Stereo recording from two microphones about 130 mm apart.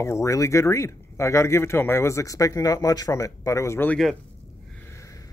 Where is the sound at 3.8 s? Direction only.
5° left (ahead or behind).